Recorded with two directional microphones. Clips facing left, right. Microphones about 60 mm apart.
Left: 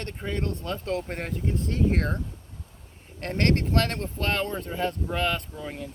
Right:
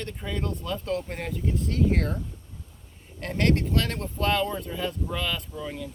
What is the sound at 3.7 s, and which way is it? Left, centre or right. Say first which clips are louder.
Speech: left 2 dB; left.